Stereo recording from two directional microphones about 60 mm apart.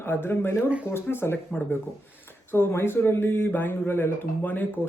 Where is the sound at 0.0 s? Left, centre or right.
Left.